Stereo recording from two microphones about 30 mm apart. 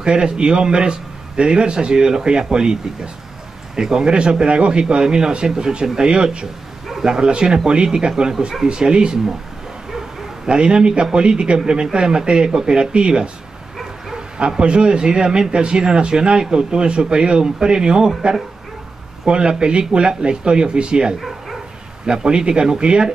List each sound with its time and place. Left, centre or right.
0.0 s a man's voice: right
10.5 s a man's voice: right
14.6 s a man's voice: right